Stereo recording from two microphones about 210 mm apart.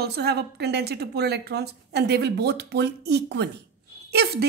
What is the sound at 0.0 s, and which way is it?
A woman's voice, 50° right (ahead or behind).